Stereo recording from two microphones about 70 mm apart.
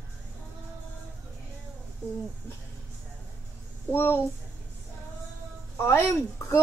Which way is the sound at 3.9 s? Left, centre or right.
Left.